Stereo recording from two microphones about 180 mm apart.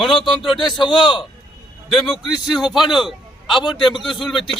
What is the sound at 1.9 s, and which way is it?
A man's voice, centre (ahead or behind).